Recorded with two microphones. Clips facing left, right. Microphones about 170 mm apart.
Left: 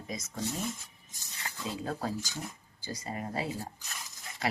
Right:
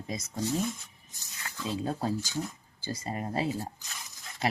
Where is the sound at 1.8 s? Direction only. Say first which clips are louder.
Right 3 dB; 25° right (ahead or behind).